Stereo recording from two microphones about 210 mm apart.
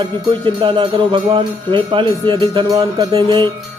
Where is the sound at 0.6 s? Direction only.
25° right (ahead or behind).